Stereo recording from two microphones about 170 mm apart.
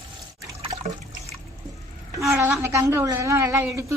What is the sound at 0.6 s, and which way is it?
Water, 40° right (ahead or behind).